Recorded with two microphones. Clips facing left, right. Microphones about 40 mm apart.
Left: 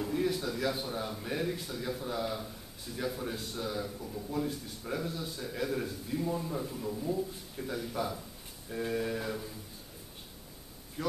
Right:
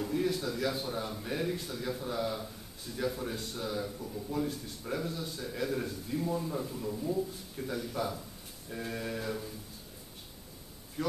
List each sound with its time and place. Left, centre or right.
0.0 s a man's voice: centre
11.0 s speech: centre